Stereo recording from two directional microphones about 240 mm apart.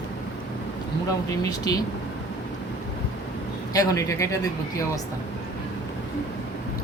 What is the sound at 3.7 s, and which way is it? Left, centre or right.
Speech, centre.